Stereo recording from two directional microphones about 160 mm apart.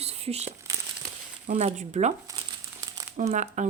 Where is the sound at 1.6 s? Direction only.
40° right (ahead or behind).